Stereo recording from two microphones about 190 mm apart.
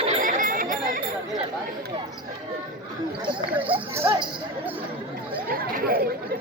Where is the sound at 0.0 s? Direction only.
40° right (ahead or behind).